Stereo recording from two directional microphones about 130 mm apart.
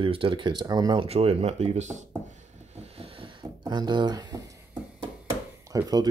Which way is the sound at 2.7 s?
55° right (ahead or behind).